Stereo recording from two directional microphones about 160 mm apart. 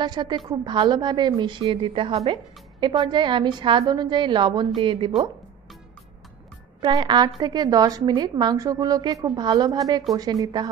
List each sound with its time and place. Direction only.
0.0 s a woman's voice: 25° right (ahead or behind)
6.8 s a woman's voice: 30° right (ahead or behind)